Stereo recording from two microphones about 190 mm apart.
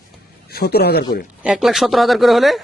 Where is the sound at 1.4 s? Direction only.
5° right (ahead or behind).